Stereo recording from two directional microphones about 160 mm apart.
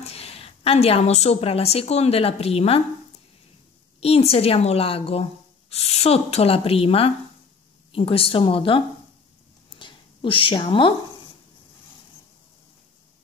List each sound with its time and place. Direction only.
0.0 s a woman's voice: 40° left (ahead or behind)
4.0 s speech: 40° left (ahead or behind)
9.8 s a sound: 30° left (ahead or behind)